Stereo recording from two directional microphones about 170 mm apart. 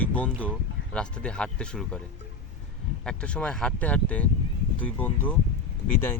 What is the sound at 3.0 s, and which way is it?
Speech, 5° left (ahead or behind).